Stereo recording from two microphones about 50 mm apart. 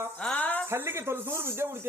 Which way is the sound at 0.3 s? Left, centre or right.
Left.